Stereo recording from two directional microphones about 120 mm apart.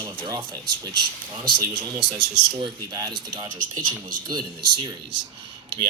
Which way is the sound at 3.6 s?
90° right.